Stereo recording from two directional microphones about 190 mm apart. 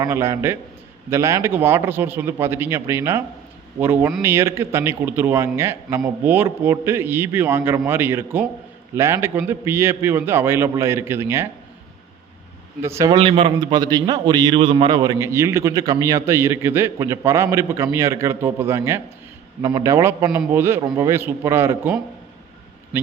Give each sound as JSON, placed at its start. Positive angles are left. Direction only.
{"t": 0.0, "sound": "a man's voice", "side_deg": -15}
{"t": 12.8, "sound": "a man's voice", "side_deg": -15}